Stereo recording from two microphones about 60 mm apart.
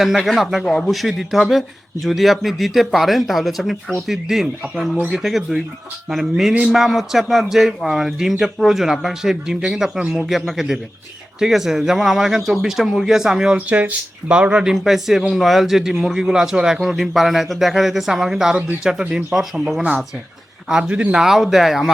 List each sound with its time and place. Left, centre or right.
0.2 s speech: centre
6.5 s speech: centre
6.7 s speech: centre
13.7 s speech: right; by 19.5 s centre
20.7 s speech: centre
21.2 s speech: centre